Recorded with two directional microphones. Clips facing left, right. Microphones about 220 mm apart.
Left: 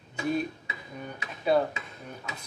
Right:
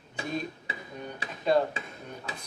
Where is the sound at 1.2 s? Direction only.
30° right (ahead or behind).